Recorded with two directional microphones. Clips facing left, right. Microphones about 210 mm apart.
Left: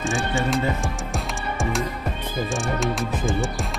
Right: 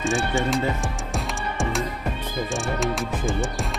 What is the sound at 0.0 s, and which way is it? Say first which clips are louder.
Speech: right 1 dB; centre (ahead or behind).